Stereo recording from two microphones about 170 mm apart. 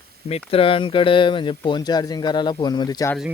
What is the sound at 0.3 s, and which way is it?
Speech, 35° left (ahead or behind).